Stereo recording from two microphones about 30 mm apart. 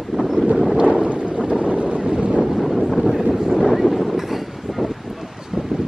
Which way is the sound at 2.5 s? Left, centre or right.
Centre.